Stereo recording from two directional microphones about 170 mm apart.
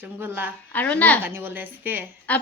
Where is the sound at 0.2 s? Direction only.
10° right (ahead or behind).